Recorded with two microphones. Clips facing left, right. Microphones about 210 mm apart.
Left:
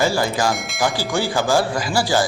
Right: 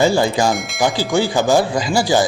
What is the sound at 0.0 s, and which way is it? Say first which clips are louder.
Speech: right 4 dB; 25° right (ahead or behind).